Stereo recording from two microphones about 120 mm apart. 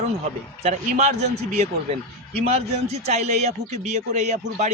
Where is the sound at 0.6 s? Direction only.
75° right (ahead or behind).